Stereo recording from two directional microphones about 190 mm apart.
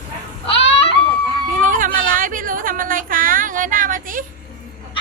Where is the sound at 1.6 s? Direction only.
45° right (ahead or behind).